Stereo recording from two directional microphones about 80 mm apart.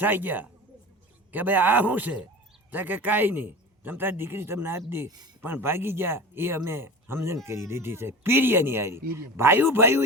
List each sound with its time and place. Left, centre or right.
0.0 s a man's voice: right
5.0 s speech: right
5.4 s speech: right